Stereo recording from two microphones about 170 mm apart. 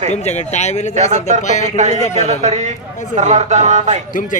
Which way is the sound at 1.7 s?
45° right (ahead or behind).